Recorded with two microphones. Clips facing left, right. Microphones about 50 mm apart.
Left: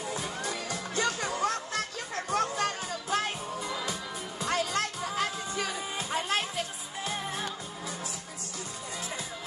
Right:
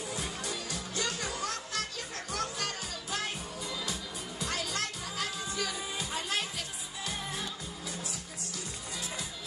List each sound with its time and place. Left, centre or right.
0.0 s music: left